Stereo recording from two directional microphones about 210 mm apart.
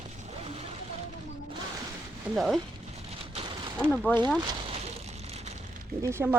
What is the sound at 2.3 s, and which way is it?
Speech, centre (ahead or behind).